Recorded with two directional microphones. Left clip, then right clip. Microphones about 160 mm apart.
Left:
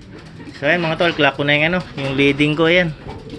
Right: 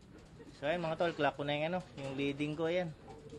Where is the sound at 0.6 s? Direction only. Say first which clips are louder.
Left 18 dB; 20° right (ahead or behind).